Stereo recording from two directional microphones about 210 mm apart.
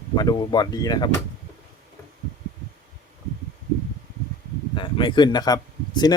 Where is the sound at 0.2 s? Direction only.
20° left (ahead or behind).